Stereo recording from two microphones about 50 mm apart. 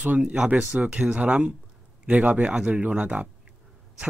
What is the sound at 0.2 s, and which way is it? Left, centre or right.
A man's voice, centre.